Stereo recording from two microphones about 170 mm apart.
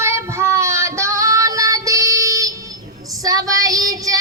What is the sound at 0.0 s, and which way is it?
Child singing, 15° right (ahead or behind).